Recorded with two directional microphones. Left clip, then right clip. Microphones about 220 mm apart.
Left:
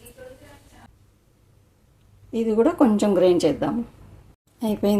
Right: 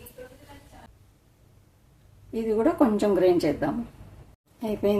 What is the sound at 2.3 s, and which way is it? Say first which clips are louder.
A woman's voice: left 4 dB; 25° left (ahead or behind).